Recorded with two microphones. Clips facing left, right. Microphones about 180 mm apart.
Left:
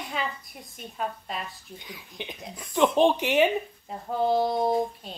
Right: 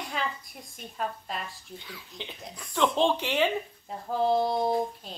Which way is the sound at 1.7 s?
15° left (ahead or behind).